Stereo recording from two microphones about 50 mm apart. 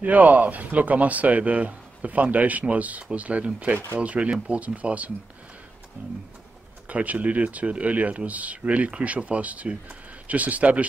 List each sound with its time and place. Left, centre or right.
0.0 s speech: right